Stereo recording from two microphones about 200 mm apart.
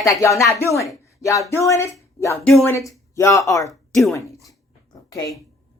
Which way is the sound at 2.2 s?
15° left (ahead or behind).